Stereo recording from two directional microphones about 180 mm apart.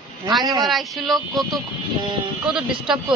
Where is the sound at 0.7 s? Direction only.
Centre (ahead or behind).